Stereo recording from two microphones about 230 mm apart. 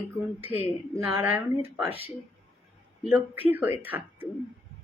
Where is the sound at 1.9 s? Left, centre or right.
Left.